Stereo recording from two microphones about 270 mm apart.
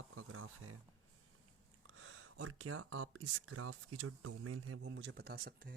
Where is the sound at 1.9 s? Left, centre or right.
Right.